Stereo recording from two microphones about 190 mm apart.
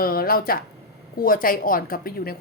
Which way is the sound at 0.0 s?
50° left (ahead or behind).